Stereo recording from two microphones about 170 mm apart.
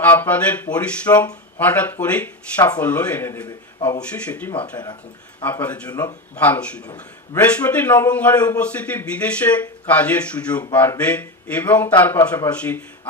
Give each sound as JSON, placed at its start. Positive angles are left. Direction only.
{"t": 0.0, "sound": "a man's voice", "side_deg": 10}
{"t": 3.4, "sound": "a man's voice", "side_deg": 25}
{"t": 4.0, "sound": "a man's voice", "side_deg": 10}